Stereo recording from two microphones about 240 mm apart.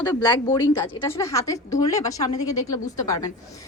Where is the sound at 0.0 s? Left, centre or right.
Centre.